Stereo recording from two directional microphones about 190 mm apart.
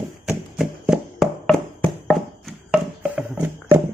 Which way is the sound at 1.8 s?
Centre (ahead or behind).